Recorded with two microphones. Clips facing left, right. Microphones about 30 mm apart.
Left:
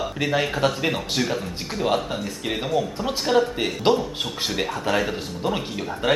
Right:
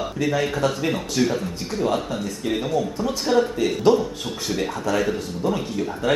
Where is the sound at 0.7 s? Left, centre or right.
Centre.